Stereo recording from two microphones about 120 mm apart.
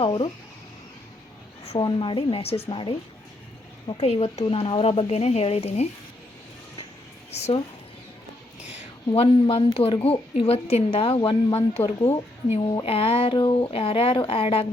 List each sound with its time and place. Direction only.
0.0 s a sound: 45° left (ahead or behind)
1.8 s speech: 45° left (ahead or behind)
3.9 s speech: 60° left (ahead or behind)
7.3 s speech: 65° left (ahead or behind)
9.1 s speech: 50° left (ahead or behind)